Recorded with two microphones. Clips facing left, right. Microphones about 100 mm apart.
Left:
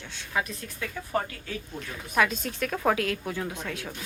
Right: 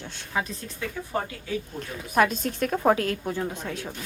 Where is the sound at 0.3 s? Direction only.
20° right (ahead or behind).